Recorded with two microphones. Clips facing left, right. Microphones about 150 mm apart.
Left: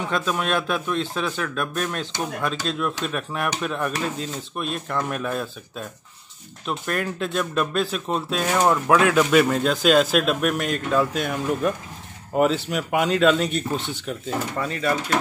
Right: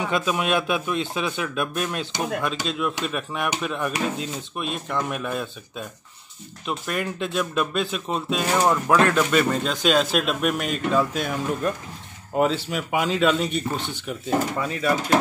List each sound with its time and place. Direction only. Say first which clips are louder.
0.1 s speech: even; 10° right (ahead or behind)